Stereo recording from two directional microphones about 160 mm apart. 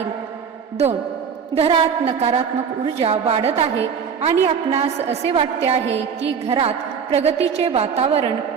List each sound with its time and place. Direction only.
1.5 s a woman's voice: 40° right (ahead or behind)